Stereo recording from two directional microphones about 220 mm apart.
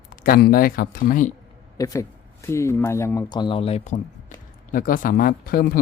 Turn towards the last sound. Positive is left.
turn(degrees=40)  # may be behind; listen again after turning